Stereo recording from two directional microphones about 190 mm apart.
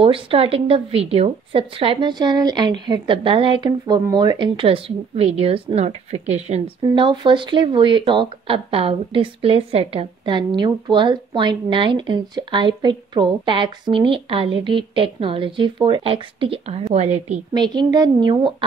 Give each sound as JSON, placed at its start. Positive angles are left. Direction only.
{"t": 0.0, "sound": "a woman's voice", "side_deg": -30}
{"t": 17.6, "sound": "a woman's voice", "side_deg": -20}